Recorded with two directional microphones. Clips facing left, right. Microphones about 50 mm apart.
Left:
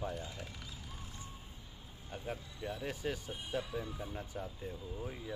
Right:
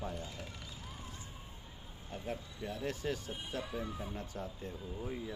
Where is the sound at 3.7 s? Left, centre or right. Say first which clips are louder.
Right 1 dB; right.